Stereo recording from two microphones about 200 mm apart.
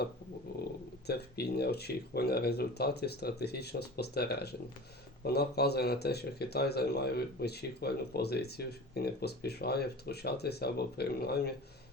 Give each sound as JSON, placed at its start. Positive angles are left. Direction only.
{"t": 1.0, "sound": "speech", "side_deg": 55}